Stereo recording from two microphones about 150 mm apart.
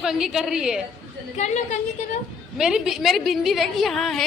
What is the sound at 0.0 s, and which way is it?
Speech, 5° right (ahead or behind).